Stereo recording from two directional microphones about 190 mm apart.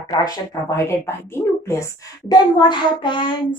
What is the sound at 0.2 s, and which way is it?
A woman's voice, 20° left (ahead or behind).